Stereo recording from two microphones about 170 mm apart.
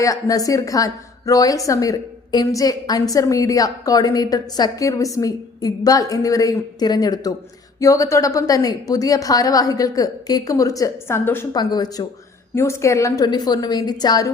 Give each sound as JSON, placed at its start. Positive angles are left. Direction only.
{"t": 0.0, "sound": "a woman's voice", "side_deg": 20}
{"t": 11.5, "sound": "a woman's voice", "side_deg": 25}